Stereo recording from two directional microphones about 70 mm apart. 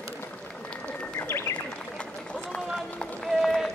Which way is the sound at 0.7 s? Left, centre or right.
Centre.